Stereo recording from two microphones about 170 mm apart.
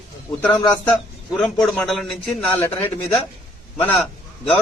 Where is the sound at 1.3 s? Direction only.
Centre (ahead or behind).